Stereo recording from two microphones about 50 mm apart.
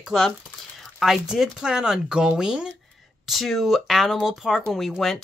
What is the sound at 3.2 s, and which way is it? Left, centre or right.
Speech, centre.